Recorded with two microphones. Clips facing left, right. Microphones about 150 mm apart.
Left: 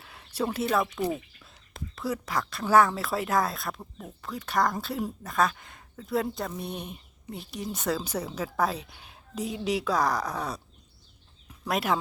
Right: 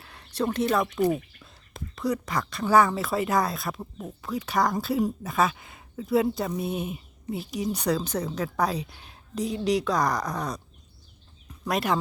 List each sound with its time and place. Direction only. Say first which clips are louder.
0.0 s speech: right 2 dB; 5° left (ahead or behind)
3.8 s speech: right 5 dB; 15° right (ahead or behind)
4.2 s speech: right 2 dB; centre (ahead or behind)
11.6 s speech: right 1 dB; centre (ahead or behind)